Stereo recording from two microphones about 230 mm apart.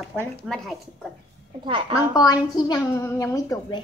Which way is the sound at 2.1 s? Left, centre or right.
Centre.